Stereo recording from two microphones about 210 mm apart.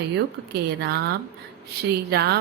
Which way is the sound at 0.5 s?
50° right (ahead or behind).